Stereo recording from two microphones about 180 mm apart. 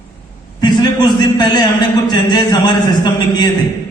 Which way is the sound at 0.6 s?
25° left (ahead or behind).